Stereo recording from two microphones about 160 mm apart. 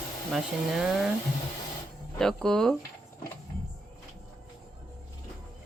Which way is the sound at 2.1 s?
5° left (ahead or behind).